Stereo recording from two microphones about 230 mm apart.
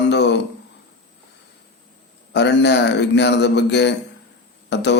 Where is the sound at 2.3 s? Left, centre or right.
Left.